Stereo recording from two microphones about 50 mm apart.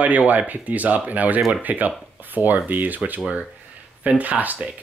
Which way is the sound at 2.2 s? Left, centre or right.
Right.